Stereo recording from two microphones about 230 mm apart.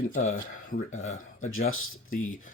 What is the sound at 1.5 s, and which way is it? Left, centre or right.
Speech, left.